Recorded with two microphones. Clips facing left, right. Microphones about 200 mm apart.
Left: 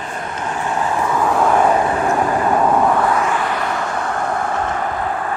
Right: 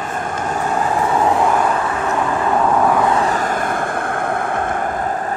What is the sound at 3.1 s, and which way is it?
Vehicle, 35° right (ahead or behind).